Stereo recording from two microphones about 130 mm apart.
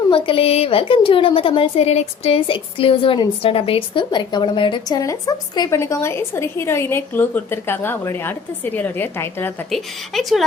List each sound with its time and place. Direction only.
0.1 s a woman's voice: 45° left (ahead or behind); by 9.5 s 15° left (ahead or behind)
9.6 s a woman's voice: centre (ahead or behind)